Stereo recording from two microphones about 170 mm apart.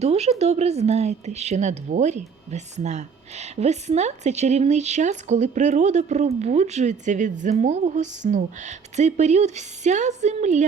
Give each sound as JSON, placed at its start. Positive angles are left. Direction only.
{"t": 0.0, "sound": "a woman's voice", "side_deg": -35}